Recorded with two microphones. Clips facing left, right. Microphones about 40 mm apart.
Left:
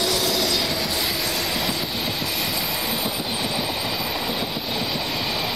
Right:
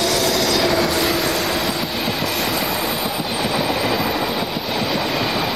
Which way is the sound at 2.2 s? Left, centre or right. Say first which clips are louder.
Right 5 dB; right.